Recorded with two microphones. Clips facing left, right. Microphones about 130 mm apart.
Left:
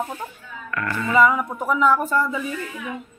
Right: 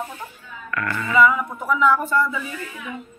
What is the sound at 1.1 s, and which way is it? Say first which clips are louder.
Music: even; 35° left (ahead or behind).